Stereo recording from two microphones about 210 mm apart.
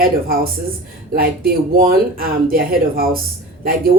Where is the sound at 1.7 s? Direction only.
45° right (ahead or behind).